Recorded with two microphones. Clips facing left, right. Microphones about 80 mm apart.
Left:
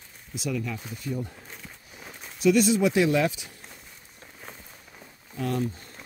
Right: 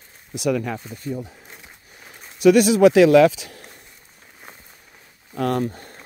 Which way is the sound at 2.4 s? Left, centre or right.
Right.